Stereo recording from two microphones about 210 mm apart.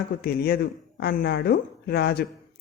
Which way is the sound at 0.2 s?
45° left (ahead or behind).